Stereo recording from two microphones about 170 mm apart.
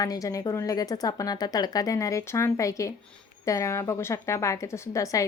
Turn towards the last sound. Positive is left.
turn(degrees=20)  # may be behind; listen again after turning